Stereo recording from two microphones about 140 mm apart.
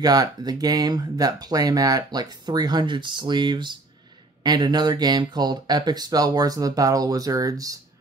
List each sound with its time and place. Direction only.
0.0 s speech: 30° right (ahead or behind)